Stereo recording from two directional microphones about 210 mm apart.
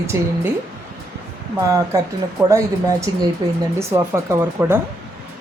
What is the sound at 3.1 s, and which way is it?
Speech, 20° right (ahead or behind).